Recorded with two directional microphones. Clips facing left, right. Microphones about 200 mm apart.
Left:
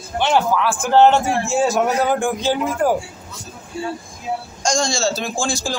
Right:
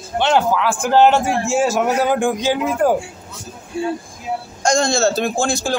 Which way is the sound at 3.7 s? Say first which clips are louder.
Right 4 dB; 55° right (ahead or behind).